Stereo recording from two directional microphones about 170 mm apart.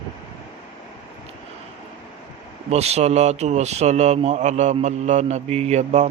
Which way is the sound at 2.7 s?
40° right (ahead or behind).